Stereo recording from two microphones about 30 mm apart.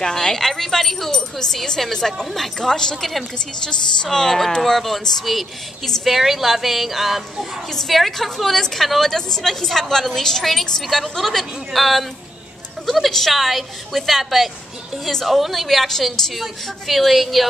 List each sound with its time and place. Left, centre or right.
0.0 s a woman's voice: centre
2.7 s speech: left
3.0 s a woman's voice: centre
3.6 s speech: left
4.6 s a woman's voice: centre
9.1 s a woman's voice: centre
13.3 s a woman's voice: centre